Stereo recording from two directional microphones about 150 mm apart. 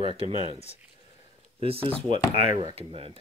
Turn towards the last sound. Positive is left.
turn(degrees=-40)  # may be behind; listen again after turning